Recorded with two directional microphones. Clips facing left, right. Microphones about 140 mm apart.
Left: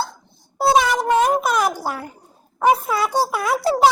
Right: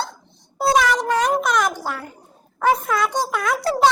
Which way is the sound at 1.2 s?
5° left (ahead or behind).